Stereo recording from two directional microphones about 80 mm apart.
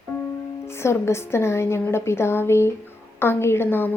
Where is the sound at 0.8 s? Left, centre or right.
Left.